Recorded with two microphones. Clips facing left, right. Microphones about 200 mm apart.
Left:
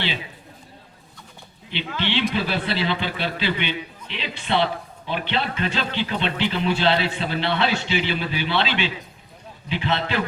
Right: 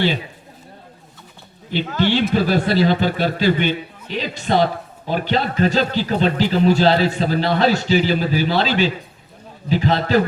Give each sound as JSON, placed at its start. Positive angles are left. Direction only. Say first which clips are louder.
{"t": 1.7, "sound": "a man's voice", "louder": "right 7 dB", "side_deg": -45}